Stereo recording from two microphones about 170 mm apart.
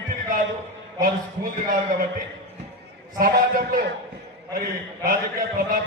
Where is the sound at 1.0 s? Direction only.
55° right (ahead or behind).